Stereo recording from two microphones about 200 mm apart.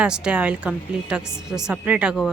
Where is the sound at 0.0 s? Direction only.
5° right (ahead or behind).